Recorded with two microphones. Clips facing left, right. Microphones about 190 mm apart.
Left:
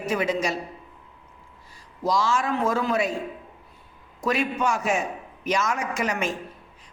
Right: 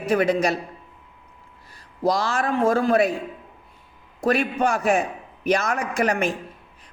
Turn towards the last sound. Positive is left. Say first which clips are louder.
# right 4 dB
turn(degrees=-60)  # may be behind; listen again after turning